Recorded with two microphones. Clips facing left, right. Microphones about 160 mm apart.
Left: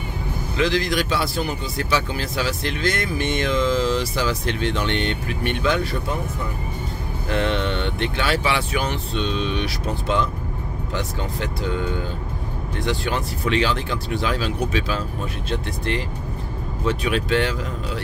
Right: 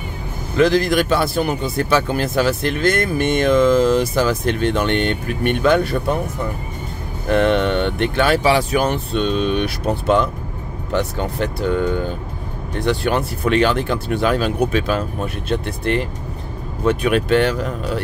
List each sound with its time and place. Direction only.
0.6 s speech: 50° right (ahead or behind)
7.2 s speech: 55° right (ahead or behind)